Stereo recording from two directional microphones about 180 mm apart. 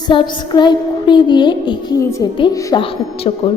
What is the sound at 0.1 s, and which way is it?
A woman's voice, 25° left (ahead or behind).